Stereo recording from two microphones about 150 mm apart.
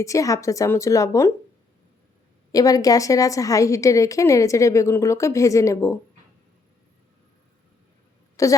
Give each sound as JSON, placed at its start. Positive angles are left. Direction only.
{"t": 0.0, "sound": "a woman's voice", "side_deg": 20}
{"t": 2.5, "sound": "a woman's voice", "side_deg": 25}
{"t": 8.4, "sound": "a woman's voice", "side_deg": 20}